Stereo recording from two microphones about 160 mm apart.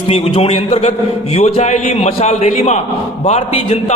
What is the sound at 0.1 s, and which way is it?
A man's voice, 40° left (ahead or behind).